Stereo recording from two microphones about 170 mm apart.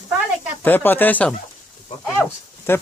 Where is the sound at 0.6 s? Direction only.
10° left (ahead or behind).